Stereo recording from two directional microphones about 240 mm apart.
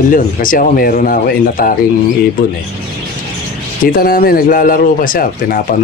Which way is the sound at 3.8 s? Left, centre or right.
Left.